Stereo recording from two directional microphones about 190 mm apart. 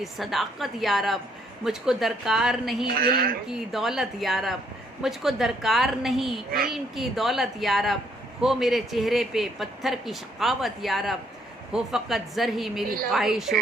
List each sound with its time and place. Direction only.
0.0 s speech: centre (ahead or behind)
3.0 s a woman's voice: 50° right (ahead or behind)
3.5 s speech: centre (ahead or behind)